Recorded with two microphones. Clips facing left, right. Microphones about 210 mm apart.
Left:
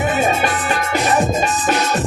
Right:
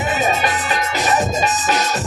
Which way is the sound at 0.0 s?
55° left (ahead or behind).